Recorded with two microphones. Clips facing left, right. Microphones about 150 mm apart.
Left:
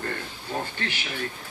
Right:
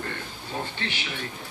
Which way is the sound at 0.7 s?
45° left (ahead or behind).